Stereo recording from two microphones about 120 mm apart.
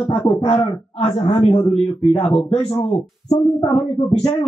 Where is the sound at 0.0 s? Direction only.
45° left (ahead or behind).